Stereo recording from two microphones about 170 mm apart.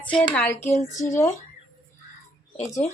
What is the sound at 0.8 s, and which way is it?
Speech, 45° left (ahead or behind).